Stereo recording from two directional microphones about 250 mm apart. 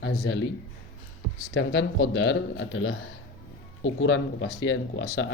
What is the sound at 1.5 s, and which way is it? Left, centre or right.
Speech, left.